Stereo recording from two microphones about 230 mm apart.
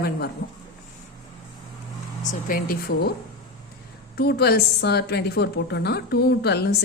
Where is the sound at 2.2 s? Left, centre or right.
Left.